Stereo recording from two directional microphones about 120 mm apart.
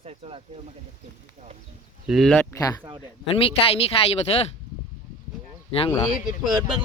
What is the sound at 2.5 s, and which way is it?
Speech, 30° left (ahead or behind).